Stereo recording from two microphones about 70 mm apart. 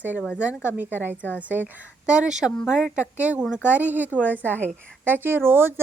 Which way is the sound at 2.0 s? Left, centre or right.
Centre.